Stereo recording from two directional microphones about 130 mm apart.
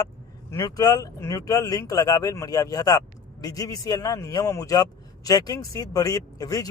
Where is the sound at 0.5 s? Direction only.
30° left (ahead or behind).